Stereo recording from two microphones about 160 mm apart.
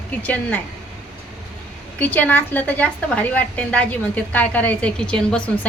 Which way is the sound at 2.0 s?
10° left (ahead or behind).